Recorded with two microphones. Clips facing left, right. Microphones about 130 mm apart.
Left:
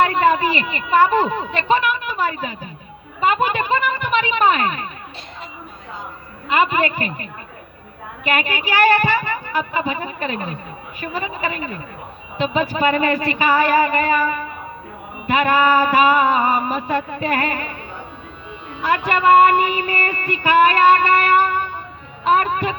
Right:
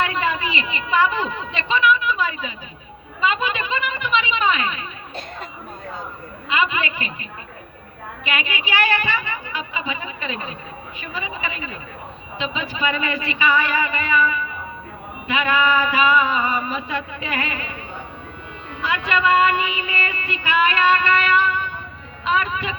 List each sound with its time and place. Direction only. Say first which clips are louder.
0.0 s a woman's voice: left 7 dB; 45° left (ahead or behind)
1.5 s music: even; 45° left (ahead or behind)
3.2 s a sound: left 4 dB; 45° left (ahead or behind)
6.5 s music: left 5 dB; 45° left (ahead or behind)
18.8 s music: left 3 dB; 45° left (ahead or behind)